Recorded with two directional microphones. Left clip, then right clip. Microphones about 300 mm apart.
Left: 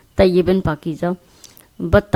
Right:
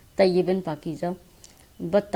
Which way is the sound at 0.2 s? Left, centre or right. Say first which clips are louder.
Left 6 dB; left.